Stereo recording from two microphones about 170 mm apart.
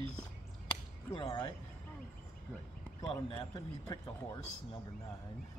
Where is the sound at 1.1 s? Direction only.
30° left (ahead or behind).